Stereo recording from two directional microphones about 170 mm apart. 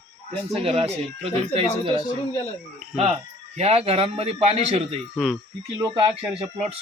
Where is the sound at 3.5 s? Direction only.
35° right (ahead or behind).